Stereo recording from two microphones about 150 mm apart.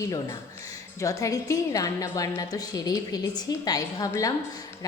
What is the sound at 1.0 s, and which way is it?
A woman's voice, 20° left (ahead or behind).